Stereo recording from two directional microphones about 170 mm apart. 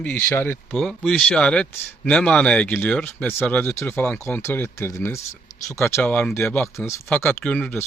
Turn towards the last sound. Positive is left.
turn(degrees=10)  # may be behind; listen again after turning